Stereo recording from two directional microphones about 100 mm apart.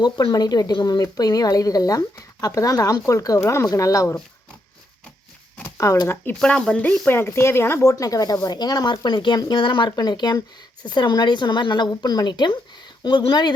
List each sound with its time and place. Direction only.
0.0 s a woman's voice: 45° left (ahead or behind)
5.5 s shuffling cards: 25° left (ahead or behind)
6.4 s a woman's voice: 10° left (ahead or behind); by 13.5 s 50° left (ahead or behind)